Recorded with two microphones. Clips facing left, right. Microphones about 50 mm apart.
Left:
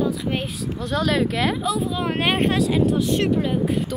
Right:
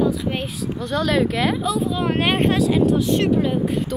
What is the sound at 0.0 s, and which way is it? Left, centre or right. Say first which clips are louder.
Speech: right 2 dB; centre.